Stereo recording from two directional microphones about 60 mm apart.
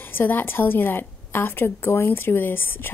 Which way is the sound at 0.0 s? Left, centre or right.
Left.